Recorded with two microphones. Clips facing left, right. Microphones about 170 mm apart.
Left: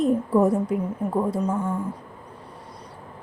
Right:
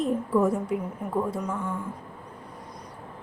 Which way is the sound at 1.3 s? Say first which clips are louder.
Left 6 dB; 30° left (ahead or behind).